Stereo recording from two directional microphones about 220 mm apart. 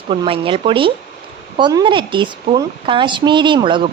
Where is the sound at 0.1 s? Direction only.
25° right (ahead or behind).